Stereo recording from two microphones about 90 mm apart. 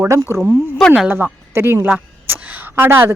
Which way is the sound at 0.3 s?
30° right (ahead or behind).